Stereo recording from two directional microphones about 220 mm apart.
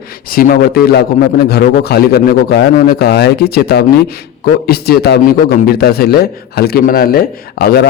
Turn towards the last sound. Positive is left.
turn(degrees=45)  # may be behind; listen again after turning